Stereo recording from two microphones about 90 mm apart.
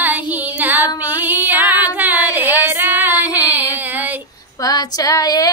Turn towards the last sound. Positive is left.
turn(degrees=40)  # may be behind; listen again after turning